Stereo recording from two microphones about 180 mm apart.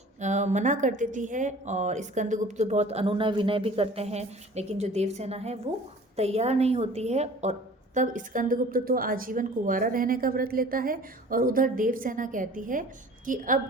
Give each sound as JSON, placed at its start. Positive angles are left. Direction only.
{"t": 0.2, "sound": "a woman's voice", "side_deg": -40}